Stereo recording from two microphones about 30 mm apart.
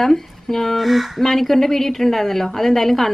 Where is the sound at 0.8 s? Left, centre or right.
Centre.